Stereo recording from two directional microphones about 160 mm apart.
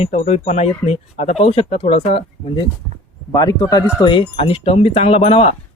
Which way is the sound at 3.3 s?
25° left (ahead or behind).